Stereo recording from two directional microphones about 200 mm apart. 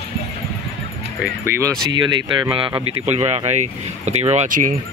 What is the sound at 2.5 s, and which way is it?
Speech, 25° right (ahead or behind).